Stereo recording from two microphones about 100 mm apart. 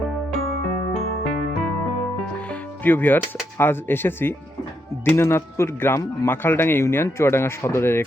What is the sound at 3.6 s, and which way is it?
Speech, 20° left (ahead or behind).